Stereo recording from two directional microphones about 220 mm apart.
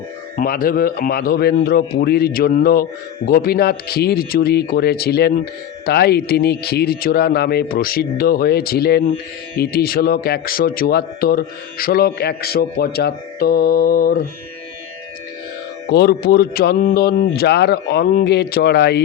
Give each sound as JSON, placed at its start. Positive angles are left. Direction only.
{"t": 0.3, "sound": "speech", "side_deg": 40}
{"t": 15.9, "sound": "speech", "side_deg": 45}